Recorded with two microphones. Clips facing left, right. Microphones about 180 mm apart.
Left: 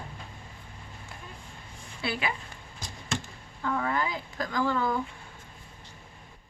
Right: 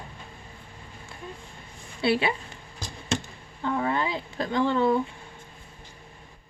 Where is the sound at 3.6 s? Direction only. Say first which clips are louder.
Right 3 dB; 25° right (ahead or behind).